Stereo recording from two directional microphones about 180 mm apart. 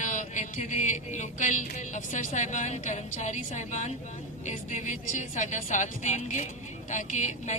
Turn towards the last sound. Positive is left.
turn(degrees=40)  # may be behind; listen again after turning